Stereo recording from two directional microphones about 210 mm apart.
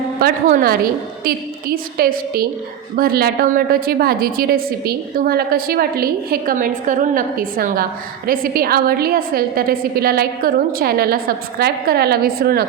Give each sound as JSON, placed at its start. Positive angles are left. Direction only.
{"t": 0.2, "sound": "a woman's voice", "side_deg": -40}